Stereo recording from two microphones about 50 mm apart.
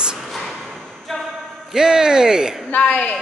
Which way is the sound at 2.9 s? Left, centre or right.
Left.